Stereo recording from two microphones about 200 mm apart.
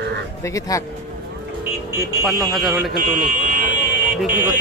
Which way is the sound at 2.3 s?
Centre (ahead or behind).